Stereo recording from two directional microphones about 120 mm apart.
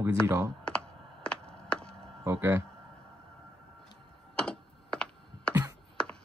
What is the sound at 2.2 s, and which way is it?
Speech, 20° right (ahead or behind).